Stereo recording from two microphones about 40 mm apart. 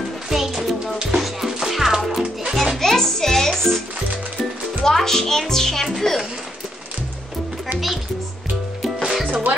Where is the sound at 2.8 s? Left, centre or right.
Centre.